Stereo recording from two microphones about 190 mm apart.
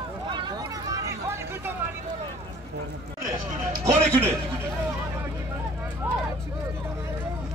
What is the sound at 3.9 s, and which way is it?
Speech, 35° right (ahead or behind).